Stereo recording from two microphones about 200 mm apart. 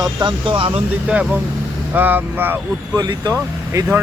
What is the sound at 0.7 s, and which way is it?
Speech, 5° right (ahead or behind).